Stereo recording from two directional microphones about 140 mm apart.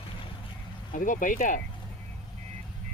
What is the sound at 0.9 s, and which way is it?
Speech, 70° left (ahead or behind).